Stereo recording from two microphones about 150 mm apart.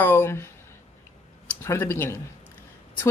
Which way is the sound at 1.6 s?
20° left (ahead or behind).